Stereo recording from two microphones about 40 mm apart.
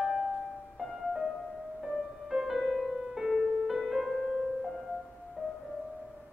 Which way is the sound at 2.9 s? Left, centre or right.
Centre.